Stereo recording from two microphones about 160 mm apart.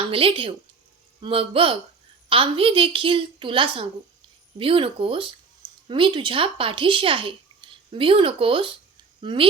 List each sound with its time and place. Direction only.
0.1 s a woman's voice: 35° right (ahead or behind)